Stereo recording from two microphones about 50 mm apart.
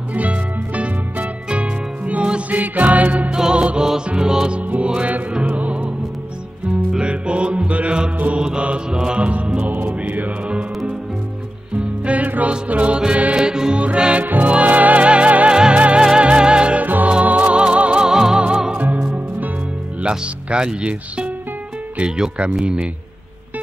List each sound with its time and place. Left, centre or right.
0.1 s music: right
3.3 s music: centre
4.6 s music: right
6.9 s music: centre
8.4 s mantra: centre
9.6 s music: right
11.7 s music: right
13.4 s music: centre
14.2 s music: right
16.8 s music: right; by 18.4 s centre
18.8 s music: right
20.0 s speech: right